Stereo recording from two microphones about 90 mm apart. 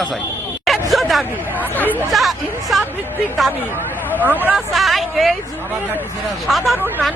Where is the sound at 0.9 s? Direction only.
Centre (ahead or behind).